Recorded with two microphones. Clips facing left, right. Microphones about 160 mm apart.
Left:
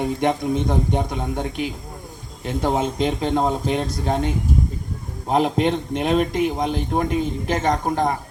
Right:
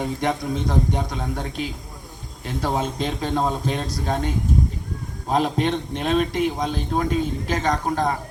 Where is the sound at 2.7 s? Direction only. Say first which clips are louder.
Left 3 dB; 15° left (ahead or behind).